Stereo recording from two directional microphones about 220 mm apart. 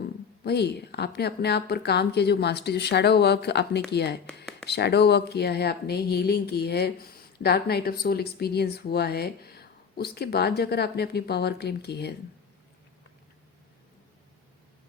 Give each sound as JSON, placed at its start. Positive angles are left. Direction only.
{"t": 0.4, "sound": "speech", "side_deg": 50}